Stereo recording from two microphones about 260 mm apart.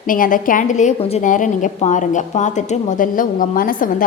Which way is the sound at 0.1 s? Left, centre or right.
Left.